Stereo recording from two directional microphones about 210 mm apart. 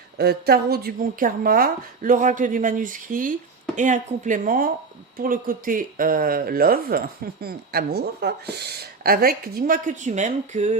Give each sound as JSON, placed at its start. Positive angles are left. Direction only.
{"t": 0.2, "sound": "a woman's voice", "side_deg": -50}